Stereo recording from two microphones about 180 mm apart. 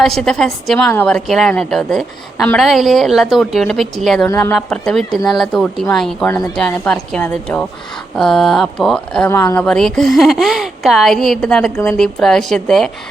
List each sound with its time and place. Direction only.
0.0 s a woman's voice: centre (ahead or behind)
9.3 s speech: 15° left (ahead or behind)
9.6 s a woman's voice: 5° left (ahead or behind)